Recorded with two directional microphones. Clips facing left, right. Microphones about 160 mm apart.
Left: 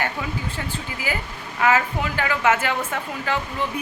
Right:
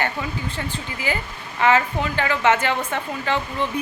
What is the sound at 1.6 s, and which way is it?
A woman's voice, 5° left (ahead or behind).